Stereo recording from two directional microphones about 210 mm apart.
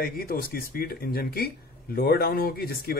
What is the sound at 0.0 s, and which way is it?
Speech, 45° left (ahead or behind).